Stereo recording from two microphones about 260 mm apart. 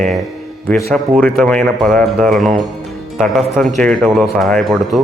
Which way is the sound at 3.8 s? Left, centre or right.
Centre.